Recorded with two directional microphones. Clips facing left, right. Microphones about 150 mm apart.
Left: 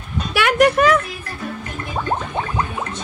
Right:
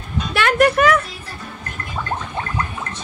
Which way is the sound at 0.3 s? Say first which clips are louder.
Left 1 dB; 10° left (ahead or behind).